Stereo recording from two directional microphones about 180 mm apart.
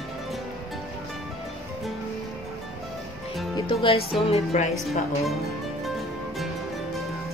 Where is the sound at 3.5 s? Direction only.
30° left (ahead or behind).